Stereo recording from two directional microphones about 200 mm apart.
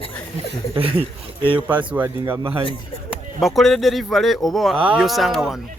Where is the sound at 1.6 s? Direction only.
10° right (ahead or behind).